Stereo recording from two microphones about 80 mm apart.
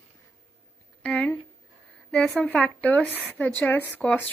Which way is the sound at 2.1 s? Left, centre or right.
Centre.